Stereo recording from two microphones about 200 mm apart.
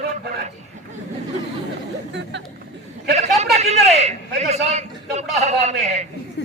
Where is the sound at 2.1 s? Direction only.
65° right (ahead or behind).